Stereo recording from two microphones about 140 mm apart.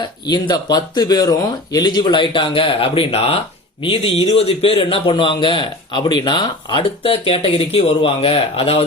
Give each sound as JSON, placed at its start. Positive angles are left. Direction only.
{"t": 0.3, "sound": "a man's voice", "side_deg": 30}